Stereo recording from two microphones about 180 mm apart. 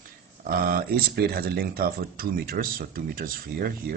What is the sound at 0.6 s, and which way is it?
Speech, 55° right (ahead or behind).